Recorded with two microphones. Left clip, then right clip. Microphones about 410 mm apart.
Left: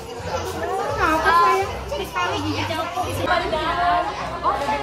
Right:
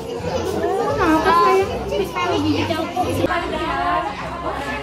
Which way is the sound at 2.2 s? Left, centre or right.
Centre.